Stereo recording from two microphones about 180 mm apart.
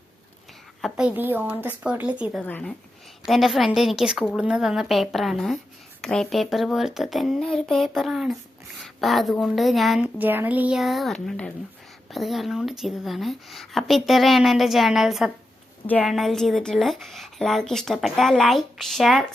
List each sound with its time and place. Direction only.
0.8 s speech: centre (ahead or behind)
2.4 s a woman's voice: 10° left (ahead or behind)